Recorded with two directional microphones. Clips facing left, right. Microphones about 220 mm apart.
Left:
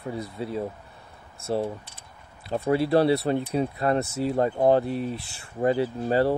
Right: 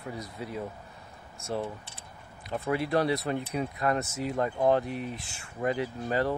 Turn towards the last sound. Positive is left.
turn(degrees=30)  # may be behind; listen again after turning